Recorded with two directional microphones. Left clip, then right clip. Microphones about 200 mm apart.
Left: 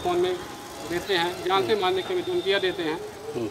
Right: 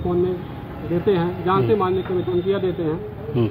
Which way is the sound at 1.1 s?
30° left (ahead or behind).